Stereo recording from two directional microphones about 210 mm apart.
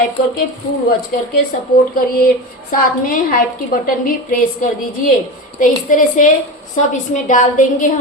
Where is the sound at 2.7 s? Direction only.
40° left (ahead or behind).